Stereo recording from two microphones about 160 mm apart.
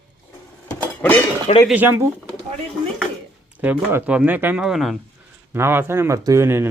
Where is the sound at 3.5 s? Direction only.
10° right (ahead or behind).